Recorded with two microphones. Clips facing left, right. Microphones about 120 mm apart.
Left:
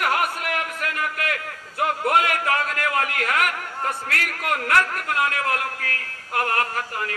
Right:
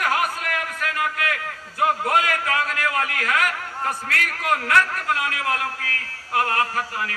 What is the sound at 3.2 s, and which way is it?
Speech, 55° left (ahead or behind).